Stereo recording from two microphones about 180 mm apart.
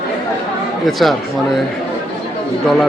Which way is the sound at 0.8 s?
Centre (ahead or behind).